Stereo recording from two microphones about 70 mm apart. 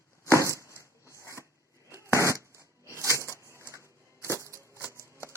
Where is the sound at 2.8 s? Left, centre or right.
Right.